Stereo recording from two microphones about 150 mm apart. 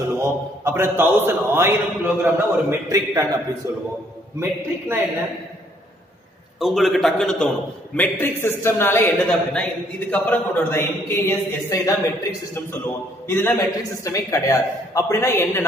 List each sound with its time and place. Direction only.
0.2 s a man's voice: 15° right (ahead or behind)
6.6 s a man's voice: centre (ahead or behind); by 15.6 s 15° left (ahead or behind)